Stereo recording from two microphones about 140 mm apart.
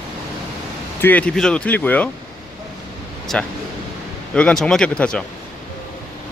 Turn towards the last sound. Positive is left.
turn(degrees=5)  # may be behind; listen again after turning